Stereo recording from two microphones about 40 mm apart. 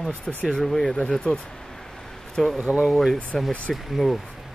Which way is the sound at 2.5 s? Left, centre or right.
Right.